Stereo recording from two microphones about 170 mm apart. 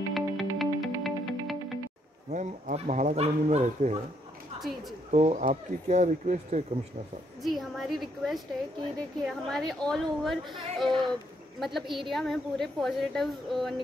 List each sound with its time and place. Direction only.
0.1 s music: centre (ahead or behind)
2.3 s speech: 45° right (ahead or behind)
5.1 s speech: 40° right (ahead or behind)
7.4 s a woman's voice: centre (ahead or behind)